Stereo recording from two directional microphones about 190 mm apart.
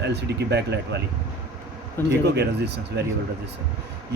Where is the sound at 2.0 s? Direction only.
10° left (ahead or behind).